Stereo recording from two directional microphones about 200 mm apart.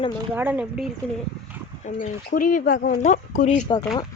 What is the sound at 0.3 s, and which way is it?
Speech, 10° right (ahead or behind).